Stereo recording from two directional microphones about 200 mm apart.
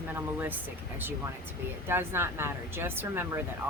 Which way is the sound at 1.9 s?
10° right (ahead or behind).